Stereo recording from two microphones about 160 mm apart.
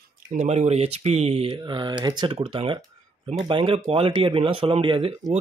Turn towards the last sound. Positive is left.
turn(degrees=-35)  # may be behind; listen again after turning